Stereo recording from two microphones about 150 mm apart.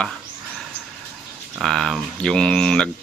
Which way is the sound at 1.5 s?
Centre (ahead or behind).